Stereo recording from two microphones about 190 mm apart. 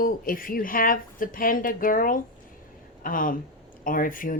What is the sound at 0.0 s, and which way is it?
Speech, 50° left (ahead or behind).